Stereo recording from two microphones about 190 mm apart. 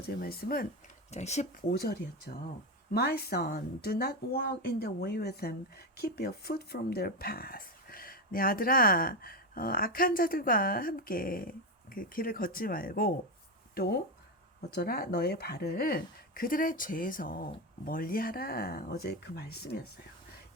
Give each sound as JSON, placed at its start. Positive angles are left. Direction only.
{"t": 0.2, "sound": "speech", "side_deg": 50}
{"t": 1.1, "sound": "speech", "side_deg": 35}
{"t": 1.7, "sound": "speech", "side_deg": 55}